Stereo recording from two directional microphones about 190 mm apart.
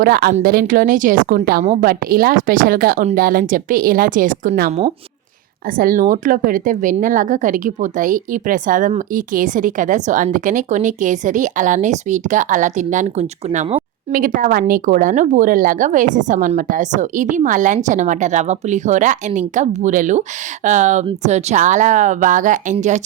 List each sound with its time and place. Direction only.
0.0 s a woman's voice: 55° right (ahead or behind)
5.7 s a woman's voice: 45° right (ahead or behind)